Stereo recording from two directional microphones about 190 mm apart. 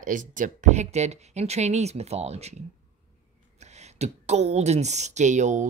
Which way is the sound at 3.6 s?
35° right (ahead or behind).